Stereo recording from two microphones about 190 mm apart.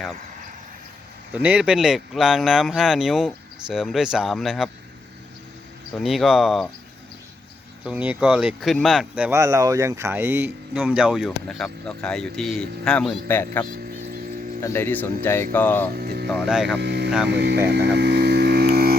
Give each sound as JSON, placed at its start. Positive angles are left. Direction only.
{"t": 1.3, "sound": "speech", "side_deg": -5}
{"t": 6.0, "sound": "speech", "side_deg": 0}
{"t": 7.9, "sound": "speech", "side_deg": -5}
{"t": 16.0, "sound": "music", "side_deg": -55}
{"t": 16.3, "sound": "speech", "side_deg": 0}
{"t": 16.7, "sound": "speech", "side_deg": -65}
{"t": 17.7, "sound": "music", "side_deg": -65}